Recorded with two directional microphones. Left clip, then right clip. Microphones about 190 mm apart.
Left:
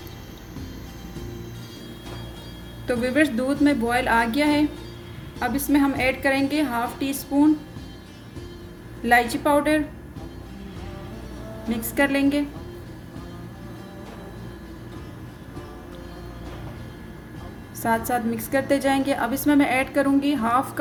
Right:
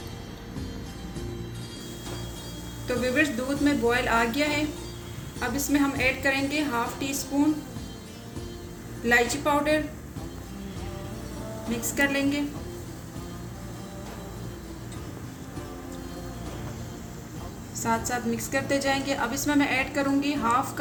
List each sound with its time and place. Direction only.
2.8 s a woman's voice: 45° left (ahead or behind)
9.0 s a woman's voice: 45° left (ahead or behind)
11.7 s a woman's voice: 45° left (ahead or behind)
17.8 s a woman's voice: 50° left (ahead or behind)